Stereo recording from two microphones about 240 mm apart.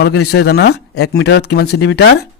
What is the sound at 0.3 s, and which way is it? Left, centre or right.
A man's voice, left.